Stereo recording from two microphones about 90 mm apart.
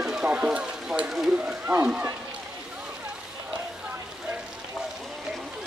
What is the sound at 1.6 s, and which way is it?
Speech, 25° right (ahead or behind).